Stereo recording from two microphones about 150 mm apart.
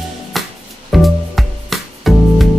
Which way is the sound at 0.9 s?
Centre (ahead or behind).